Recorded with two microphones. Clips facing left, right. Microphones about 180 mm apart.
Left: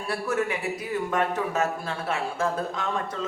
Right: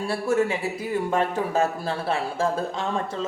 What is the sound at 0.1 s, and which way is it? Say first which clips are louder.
Speech: right 3 dB; 25° right (ahead or behind).